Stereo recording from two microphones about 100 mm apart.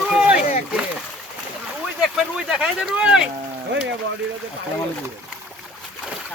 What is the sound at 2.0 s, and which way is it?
Speech, 5° right (ahead or behind).